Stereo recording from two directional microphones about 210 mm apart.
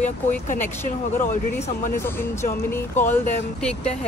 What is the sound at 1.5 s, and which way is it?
Speech, 10° left (ahead or behind).